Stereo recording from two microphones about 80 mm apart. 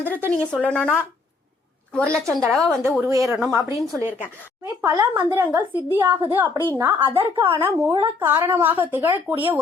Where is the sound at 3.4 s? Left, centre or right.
Right.